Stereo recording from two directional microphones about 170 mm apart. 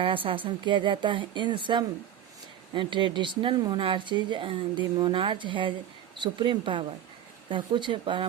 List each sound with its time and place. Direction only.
0.0 s speech: 30° right (ahead or behind)